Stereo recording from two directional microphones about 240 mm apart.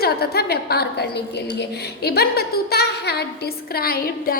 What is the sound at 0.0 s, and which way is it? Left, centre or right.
A woman's voice, left.